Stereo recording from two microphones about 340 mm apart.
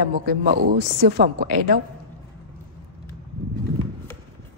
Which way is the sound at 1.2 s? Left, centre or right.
Right.